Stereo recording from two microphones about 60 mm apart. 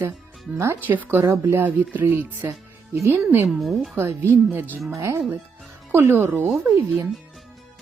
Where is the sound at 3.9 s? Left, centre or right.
Right.